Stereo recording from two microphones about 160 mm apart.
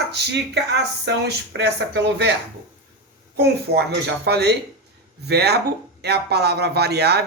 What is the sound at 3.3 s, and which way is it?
Speech, 90° right.